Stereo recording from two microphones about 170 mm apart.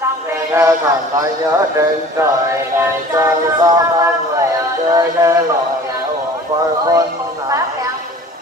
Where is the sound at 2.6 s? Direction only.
15° right (ahead or behind).